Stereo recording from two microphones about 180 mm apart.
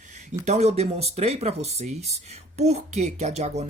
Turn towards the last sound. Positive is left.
turn(degrees=-40)  # may be behind; listen again after turning